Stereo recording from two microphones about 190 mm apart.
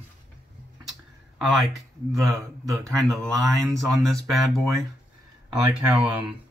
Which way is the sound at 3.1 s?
Centre (ahead or behind).